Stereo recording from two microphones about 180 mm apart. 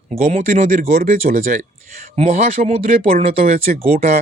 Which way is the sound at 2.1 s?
40° right (ahead or behind).